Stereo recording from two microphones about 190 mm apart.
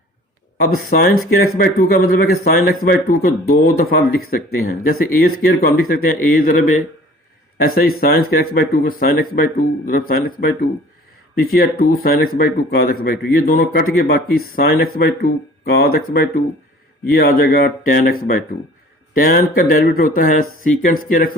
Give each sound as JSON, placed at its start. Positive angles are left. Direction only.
{"t": 0.6, "sound": "speech", "side_deg": 50}